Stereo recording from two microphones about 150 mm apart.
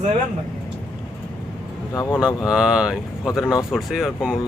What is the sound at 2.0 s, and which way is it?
Speech, 20° left (ahead or behind).